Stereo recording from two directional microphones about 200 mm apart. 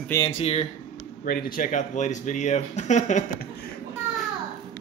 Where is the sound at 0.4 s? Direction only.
30° left (ahead or behind).